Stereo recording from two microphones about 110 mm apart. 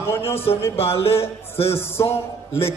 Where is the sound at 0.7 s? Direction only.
60° left (ahead or behind).